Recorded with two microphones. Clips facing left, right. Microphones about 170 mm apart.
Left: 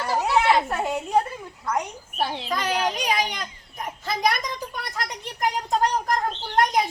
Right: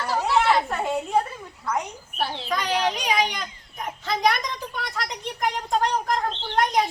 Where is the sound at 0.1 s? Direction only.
10° left (ahead or behind).